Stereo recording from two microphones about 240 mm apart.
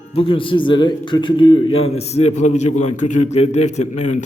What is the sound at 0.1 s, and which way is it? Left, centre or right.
A man's voice, left.